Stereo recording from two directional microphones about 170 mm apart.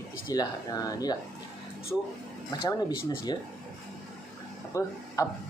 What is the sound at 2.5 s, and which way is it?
Speech, 20° left (ahead or behind).